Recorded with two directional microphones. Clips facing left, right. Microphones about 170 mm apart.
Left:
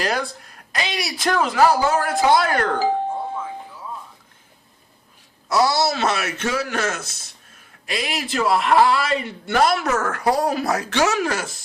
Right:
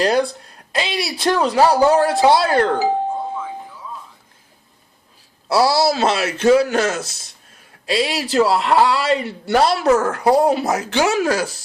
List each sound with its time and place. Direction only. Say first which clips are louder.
0.0 s a man's voice: right 7 dB; 30° right (ahead or behind)
5.5 s a man's voice: right 3 dB; 30° right (ahead or behind)